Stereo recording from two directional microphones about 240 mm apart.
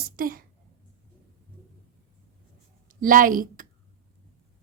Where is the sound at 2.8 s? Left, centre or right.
Right.